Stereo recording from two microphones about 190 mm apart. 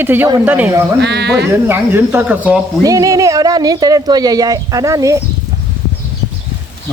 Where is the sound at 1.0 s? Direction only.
60° right (ahead or behind).